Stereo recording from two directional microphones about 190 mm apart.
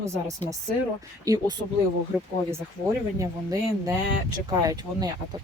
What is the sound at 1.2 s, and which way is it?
Speech, 20° right (ahead or behind).